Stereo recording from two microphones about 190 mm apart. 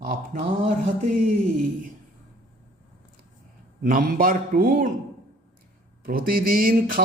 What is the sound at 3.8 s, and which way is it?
A man's voice, 50° right (ahead or behind).